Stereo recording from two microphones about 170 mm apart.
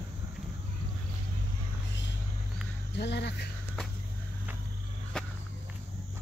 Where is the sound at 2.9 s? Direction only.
85° left.